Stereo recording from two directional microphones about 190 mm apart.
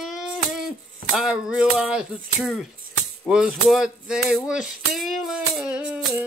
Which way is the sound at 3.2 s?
5° right (ahead or behind).